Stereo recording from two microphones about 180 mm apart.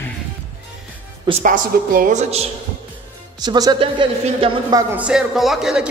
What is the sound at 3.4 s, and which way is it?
Speech, 25° right (ahead or behind).